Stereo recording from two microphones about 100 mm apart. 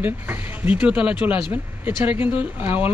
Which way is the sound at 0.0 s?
20° right (ahead or behind).